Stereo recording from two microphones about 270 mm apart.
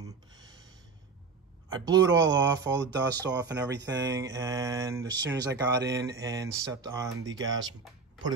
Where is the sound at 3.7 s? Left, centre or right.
Right.